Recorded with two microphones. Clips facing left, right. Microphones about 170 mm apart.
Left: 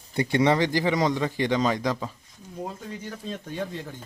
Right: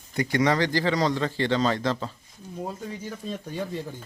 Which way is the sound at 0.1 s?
25° left (ahead or behind).